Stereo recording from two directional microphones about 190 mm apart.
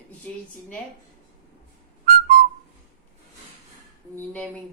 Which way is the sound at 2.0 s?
50° right (ahead or behind).